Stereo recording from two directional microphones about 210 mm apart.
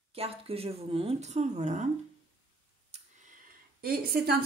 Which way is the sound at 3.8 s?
45° right (ahead or behind).